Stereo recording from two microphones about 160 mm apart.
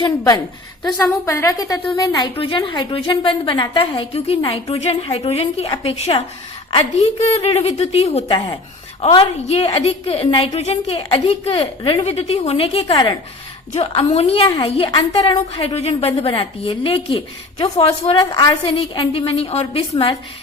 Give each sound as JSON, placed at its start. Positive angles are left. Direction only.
{"t": 0.9, "sound": "a woman's voice", "side_deg": 15}